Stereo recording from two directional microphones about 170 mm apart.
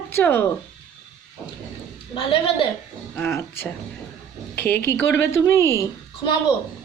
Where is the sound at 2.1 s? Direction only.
30° left (ahead or behind).